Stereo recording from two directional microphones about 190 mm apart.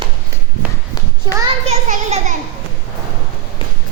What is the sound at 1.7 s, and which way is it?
Speech, 40° right (ahead or behind).